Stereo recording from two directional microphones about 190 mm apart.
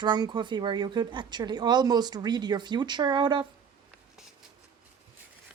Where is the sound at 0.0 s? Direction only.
25° right (ahead or behind).